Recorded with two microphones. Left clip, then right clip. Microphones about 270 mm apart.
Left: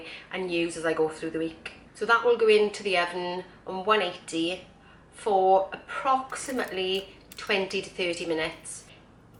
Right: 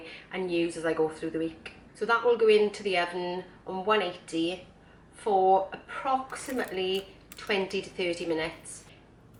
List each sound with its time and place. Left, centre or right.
0.0 s speech: centre
5.3 s speech: right
5.7 s speech: centre